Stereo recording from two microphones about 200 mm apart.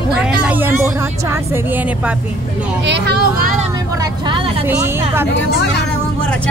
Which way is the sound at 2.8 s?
60° right (ahead or behind).